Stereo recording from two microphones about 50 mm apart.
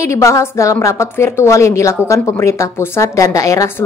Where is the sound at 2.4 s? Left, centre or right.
Left.